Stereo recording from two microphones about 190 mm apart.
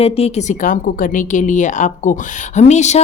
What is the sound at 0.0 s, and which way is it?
A woman's voice, 35° left (ahead or behind).